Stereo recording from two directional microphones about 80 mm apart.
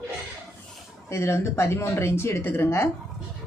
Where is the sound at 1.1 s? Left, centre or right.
Left.